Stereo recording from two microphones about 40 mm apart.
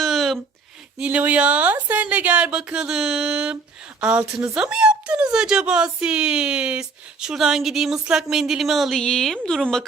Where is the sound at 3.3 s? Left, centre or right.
Right.